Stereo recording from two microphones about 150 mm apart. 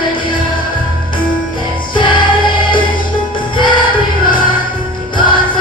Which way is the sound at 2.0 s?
30° left (ahead or behind).